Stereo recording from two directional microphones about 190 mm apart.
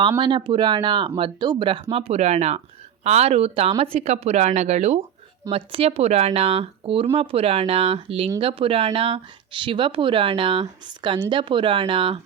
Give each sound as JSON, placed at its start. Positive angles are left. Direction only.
{"t": 0.2, "sound": "speech", "side_deg": -25}